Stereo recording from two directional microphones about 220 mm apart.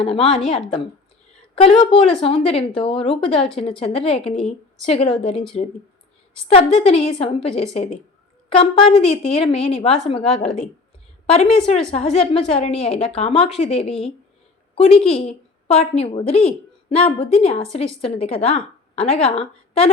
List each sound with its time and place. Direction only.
0.0 s a woman's voice: 25° left (ahead or behind)
6.5 s a woman's voice: 25° left (ahead or behind)